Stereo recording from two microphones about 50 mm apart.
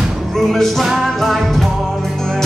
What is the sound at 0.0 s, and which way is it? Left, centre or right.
Music, centre.